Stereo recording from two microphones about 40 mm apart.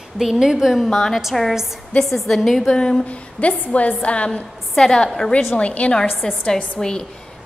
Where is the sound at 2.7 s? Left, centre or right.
Centre.